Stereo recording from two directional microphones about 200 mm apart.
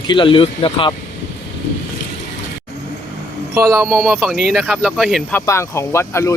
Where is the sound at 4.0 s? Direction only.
Centre (ahead or behind).